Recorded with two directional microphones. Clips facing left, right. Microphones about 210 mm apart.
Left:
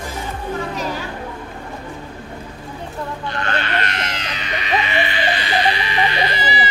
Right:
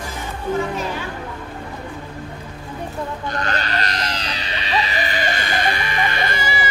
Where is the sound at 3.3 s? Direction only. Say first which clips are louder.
Left 2 dB; 40° right (ahead or behind).